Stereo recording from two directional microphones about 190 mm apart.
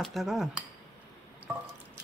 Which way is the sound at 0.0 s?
Centre (ahead or behind).